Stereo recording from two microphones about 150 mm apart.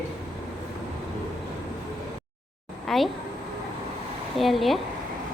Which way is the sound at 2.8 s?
Centre (ahead or behind).